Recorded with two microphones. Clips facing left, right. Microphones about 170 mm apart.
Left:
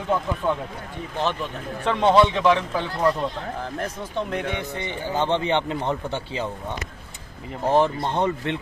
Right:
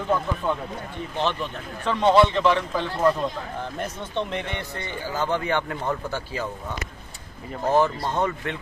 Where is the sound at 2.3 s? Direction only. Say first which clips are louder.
Left 1 dB; 10° left (ahead or behind).